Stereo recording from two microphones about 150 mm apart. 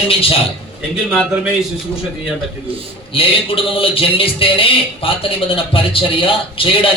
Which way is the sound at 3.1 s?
35° left (ahead or behind).